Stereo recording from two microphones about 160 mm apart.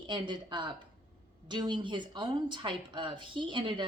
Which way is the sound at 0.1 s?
30° right (ahead or behind).